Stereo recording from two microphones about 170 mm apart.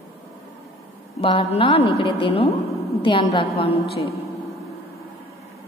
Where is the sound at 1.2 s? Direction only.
35° left (ahead or behind).